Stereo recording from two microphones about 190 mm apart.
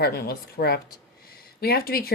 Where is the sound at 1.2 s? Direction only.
55° left (ahead or behind).